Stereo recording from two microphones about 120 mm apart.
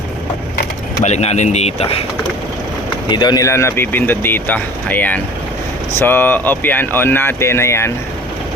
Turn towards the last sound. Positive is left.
turn(degrees=20)  # may be behind; listen again after turning